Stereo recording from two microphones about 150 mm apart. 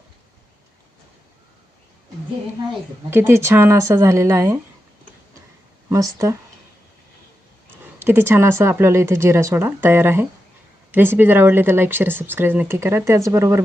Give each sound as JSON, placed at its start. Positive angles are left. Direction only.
{"t": 3.1, "sound": "speech", "side_deg": -15}
{"t": 5.9, "sound": "speech", "side_deg": -20}
{"t": 7.9, "sound": "speech", "side_deg": -15}